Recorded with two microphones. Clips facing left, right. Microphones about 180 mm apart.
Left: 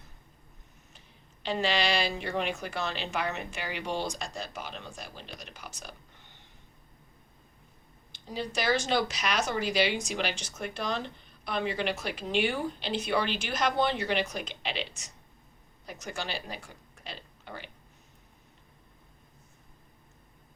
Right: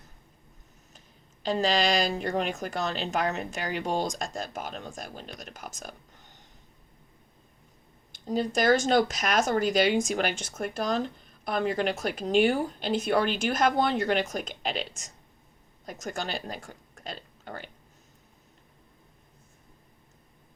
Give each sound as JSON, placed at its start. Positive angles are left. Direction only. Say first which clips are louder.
{"t": 0.9, "sound": "speech", "louder": "right 1 dB", "side_deg": -40}
{"t": 8.1, "sound": "speech", "louder": "right 7 dB", "side_deg": -45}